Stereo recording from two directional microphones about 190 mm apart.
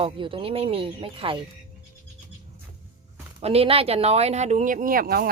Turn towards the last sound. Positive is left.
turn(degrees=-50)  # may be behind; listen again after turning